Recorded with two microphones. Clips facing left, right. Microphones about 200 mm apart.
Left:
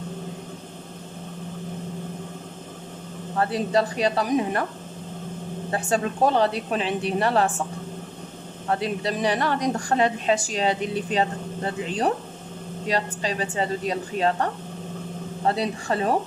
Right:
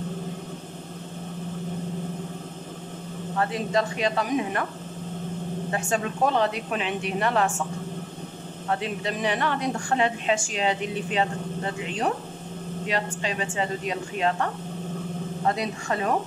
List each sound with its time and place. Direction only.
3.3 s a woman's voice: 35° left (ahead or behind)
5.7 s a woman's voice: 35° left (ahead or behind)
8.6 s a woman's voice: 40° left (ahead or behind)